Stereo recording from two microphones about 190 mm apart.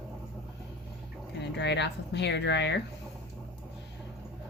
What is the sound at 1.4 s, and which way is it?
Speech, 65° left (ahead or behind).